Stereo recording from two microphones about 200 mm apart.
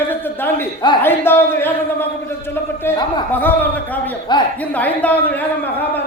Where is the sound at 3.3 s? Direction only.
10° left (ahead or behind).